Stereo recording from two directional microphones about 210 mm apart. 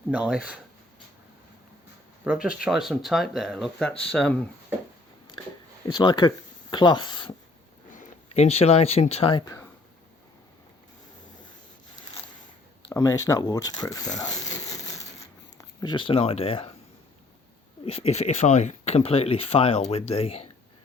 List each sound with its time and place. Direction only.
0.1 s speech: 5° right (ahead or behind)
2.2 s speech: 5° right (ahead or behind)
5.9 s speech: 20° left (ahead or behind)
7.9 s speech: 35° left (ahead or behind); by 9.6 s 15° left (ahead or behind)
12.9 s speech: 15° left (ahead or behind)
15.5 s speech: 20° left (ahead or behind)
17.8 s speech: 30° left (ahead or behind)